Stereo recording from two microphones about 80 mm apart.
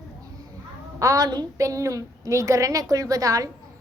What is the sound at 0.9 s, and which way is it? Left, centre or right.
Speech, right.